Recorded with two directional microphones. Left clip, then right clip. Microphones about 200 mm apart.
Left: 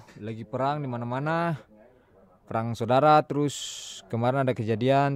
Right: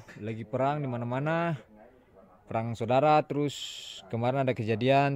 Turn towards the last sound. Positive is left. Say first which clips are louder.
# left 1 dB
turn(degrees=20)  # may be behind; listen again after turning